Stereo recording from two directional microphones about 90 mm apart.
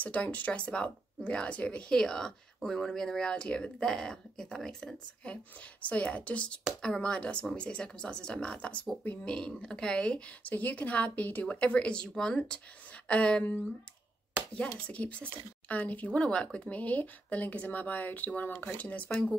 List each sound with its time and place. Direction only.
0.0 s speech: 15° left (ahead or behind)
9.3 s speech: 10° left (ahead or behind)